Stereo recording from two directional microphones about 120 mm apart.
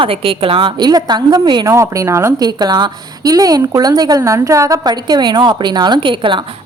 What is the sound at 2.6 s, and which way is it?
A woman's voice, 35° right (ahead or behind).